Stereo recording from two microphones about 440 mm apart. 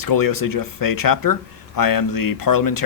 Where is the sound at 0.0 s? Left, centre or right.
Left.